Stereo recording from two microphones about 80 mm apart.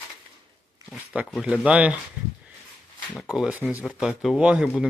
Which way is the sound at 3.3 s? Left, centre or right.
Centre.